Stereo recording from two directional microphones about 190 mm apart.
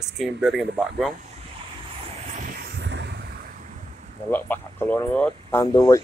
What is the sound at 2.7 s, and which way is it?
Vehicle, 70° right (ahead or behind).